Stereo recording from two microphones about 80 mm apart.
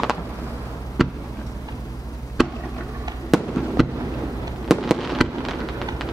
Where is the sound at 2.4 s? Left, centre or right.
Centre.